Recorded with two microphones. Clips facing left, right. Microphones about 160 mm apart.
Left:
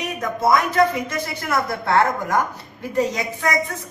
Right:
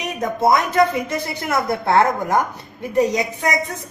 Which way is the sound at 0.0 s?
20° right (ahead or behind).